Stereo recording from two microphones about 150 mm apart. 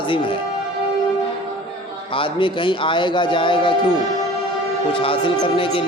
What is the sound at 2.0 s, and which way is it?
A man's voice, 35° left (ahead or behind).